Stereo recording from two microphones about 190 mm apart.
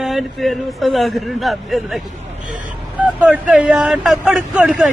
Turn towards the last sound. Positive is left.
turn(degrees=-5)  # may be behind; listen again after turning